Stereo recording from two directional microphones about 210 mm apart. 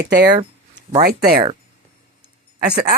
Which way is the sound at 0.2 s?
50° right (ahead or behind).